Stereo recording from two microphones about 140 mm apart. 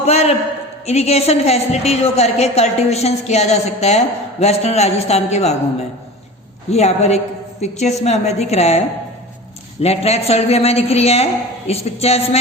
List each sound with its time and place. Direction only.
0.0 s a sound: 50° left (ahead or behind)
0.9 s a woman's voice: 50° left (ahead or behind)
6.7 s a woman's voice: 50° left (ahead or behind)
9.8 s a woman's voice: 45° left (ahead or behind)